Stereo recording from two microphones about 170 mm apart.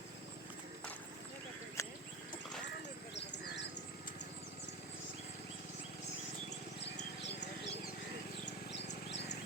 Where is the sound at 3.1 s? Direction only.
90° left.